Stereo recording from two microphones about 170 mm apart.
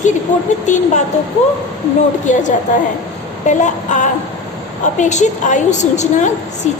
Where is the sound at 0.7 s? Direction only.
45° left (ahead or behind).